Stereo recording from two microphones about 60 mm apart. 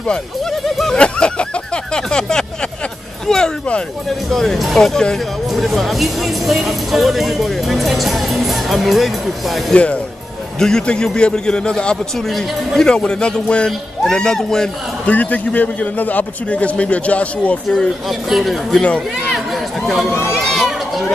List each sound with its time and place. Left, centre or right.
0.5 s speech: centre
2.0 s a sound: centre
3.3 s a man's voice: centre
10.6 s a man's voice: centre
15.0 s a man's voice: left
18.0 s speech: centre
18.7 s a man's voice: centre
19.3 s run: centre